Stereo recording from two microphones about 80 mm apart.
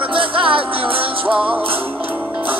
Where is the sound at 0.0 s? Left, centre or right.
Right.